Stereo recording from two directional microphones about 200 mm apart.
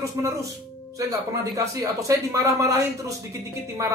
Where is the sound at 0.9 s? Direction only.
15° right (ahead or behind).